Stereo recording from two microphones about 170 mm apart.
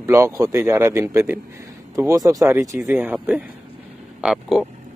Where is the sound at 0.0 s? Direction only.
15° right (ahead or behind).